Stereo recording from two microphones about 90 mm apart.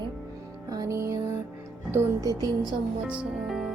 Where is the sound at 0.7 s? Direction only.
40° right (ahead or behind).